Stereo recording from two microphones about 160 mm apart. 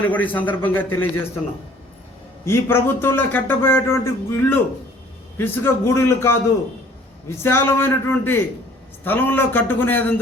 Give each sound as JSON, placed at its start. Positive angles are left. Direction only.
{"t": 0.0, "sound": "a man's voice", "side_deg": 10}
{"t": 2.4, "sound": "a man's voice", "side_deg": 15}